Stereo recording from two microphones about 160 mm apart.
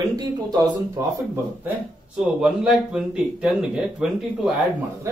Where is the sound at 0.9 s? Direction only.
15° right (ahead or behind).